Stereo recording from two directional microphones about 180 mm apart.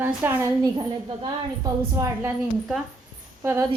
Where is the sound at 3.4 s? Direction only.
15° right (ahead or behind).